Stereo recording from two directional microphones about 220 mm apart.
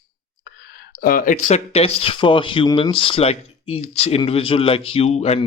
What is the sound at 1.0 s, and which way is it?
Speech, 40° left (ahead or behind).